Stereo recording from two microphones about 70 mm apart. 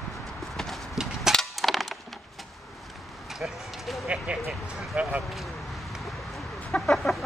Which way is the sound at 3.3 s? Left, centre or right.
Centre.